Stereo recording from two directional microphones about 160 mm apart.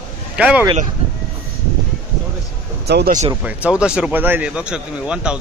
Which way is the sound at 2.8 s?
90° right.